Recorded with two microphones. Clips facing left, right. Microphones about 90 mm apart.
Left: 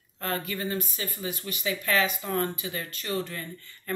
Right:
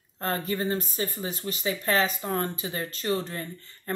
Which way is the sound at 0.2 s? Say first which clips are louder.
Right 3 dB; 35° right (ahead or behind).